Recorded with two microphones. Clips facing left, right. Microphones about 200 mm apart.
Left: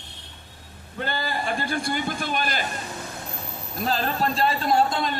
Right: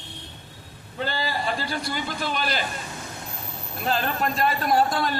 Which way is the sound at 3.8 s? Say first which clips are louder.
Left 1 dB; 35° left (ahead or behind).